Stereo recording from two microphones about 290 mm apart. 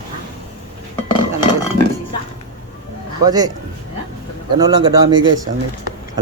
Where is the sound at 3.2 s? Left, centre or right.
Centre.